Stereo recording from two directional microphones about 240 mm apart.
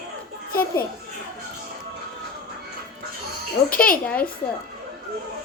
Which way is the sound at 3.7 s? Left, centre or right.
Left.